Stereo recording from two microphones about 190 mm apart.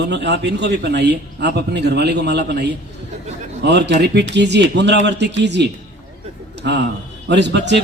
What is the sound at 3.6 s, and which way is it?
A man's voice, 65° right (ahead or behind).